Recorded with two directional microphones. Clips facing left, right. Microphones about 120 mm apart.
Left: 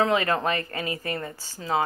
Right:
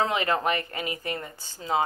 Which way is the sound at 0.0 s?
25° right (ahead or behind).